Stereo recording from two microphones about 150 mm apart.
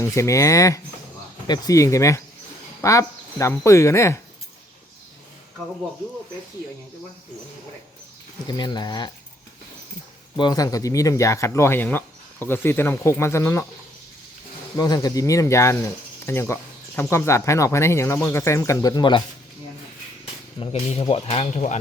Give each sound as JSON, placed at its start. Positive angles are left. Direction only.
{"t": 0.0, "sound": "speech", "side_deg": 20}
{"t": 8.4, "sound": "speech", "side_deg": 30}
{"t": 10.3, "sound": "speech", "side_deg": 30}
{"t": 14.8, "sound": "speech", "side_deg": 25}
{"t": 20.6, "sound": "speech", "side_deg": 40}